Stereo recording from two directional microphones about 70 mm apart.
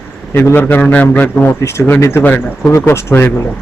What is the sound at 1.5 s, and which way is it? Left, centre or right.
Speech, left.